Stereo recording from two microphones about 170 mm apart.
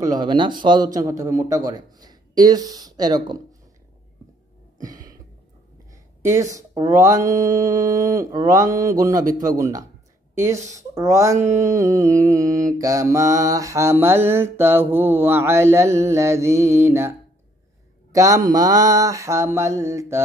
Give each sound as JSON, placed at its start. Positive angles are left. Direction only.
{"t": 0.0, "sound": "a man's voice", "side_deg": -25}
{"t": 6.2, "sound": "a man's voice", "side_deg": -20}
{"t": 10.7, "sound": "a sound", "side_deg": -20}
{"t": 18.1, "sound": "a man's voice", "side_deg": -20}